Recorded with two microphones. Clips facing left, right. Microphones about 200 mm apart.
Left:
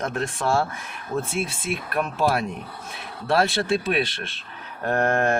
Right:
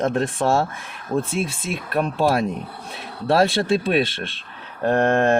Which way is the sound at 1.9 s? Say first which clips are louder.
Right 4 dB; 30° right (ahead or behind).